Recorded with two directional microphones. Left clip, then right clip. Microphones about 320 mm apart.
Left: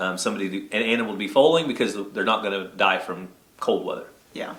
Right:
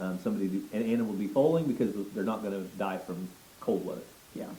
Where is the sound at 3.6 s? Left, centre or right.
Left.